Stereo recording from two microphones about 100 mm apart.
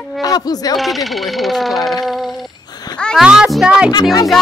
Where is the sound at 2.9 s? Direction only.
10° left (ahead or behind).